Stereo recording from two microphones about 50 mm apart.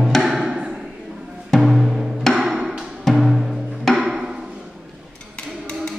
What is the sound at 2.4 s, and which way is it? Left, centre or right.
Music, centre.